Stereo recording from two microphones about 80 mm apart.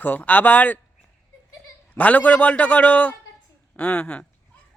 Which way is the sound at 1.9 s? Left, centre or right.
Centre.